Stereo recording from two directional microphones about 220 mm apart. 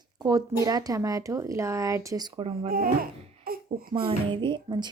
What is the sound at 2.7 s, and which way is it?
Speech, 40° right (ahead or behind).